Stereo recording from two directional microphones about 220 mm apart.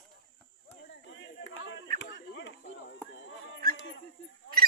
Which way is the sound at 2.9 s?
55° left (ahead or behind).